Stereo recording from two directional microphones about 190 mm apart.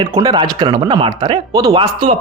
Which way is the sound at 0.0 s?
20° right (ahead or behind).